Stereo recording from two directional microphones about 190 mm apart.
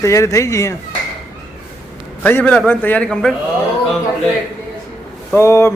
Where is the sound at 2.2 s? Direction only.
10° left (ahead or behind).